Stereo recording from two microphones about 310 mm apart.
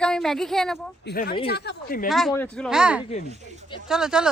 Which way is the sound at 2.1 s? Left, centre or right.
Centre.